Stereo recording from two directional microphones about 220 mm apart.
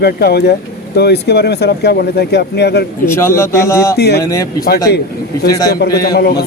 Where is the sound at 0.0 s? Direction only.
45° left (ahead or behind).